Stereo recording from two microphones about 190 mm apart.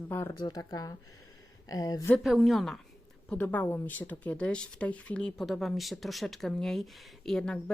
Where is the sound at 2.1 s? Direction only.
Centre (ahead or behind).